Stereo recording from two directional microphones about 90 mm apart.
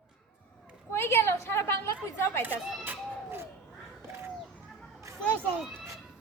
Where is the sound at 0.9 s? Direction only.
30° left (ahead or behind).